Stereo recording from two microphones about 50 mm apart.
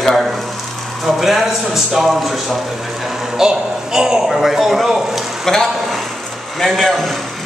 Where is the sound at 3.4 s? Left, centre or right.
Centre.